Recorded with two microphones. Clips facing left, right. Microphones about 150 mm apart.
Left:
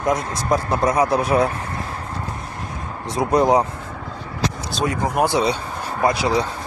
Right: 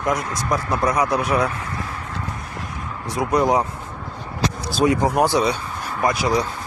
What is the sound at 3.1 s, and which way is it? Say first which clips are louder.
Speech: left 2 dB; 25° left (ahead or behind).